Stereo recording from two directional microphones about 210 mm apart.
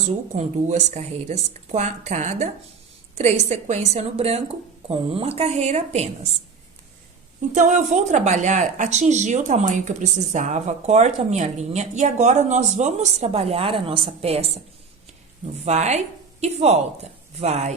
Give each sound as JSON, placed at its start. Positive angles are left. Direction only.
{"t": 0.3, "sound": "a woman's voice", "side_deg": -35}
{"t": 7.5, "sound": "speech", "side_deg": -35}
{"t": 15.6, "sound": "speech", "side_deg": -30}